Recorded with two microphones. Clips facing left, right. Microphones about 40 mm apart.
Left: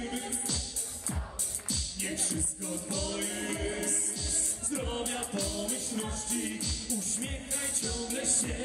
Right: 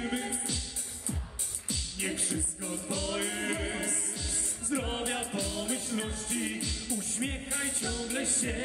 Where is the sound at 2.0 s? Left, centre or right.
Centre.